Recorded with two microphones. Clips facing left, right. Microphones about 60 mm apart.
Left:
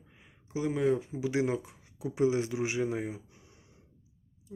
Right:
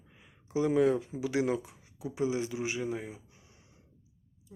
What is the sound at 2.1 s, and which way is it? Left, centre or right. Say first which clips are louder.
Speech: left 4 dB; left.